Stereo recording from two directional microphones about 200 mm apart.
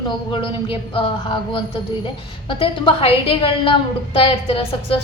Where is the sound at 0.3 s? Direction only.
25° left (ahead or behind).